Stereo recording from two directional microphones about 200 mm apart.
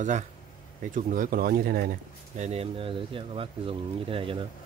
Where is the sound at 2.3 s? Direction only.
35° right (ahead or behind).